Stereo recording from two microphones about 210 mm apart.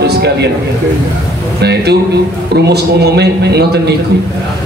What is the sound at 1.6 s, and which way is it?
A man's voice, 50° right (ahead or behind).